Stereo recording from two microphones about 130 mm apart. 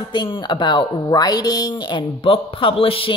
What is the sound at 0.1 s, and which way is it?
Speech, 35° left (ahead or behind).